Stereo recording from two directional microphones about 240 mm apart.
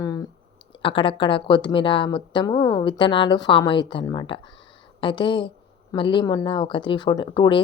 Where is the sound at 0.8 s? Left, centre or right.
Left.